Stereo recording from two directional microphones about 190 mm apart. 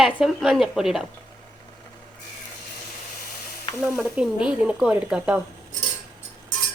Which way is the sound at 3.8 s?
5° right (ahead or behind).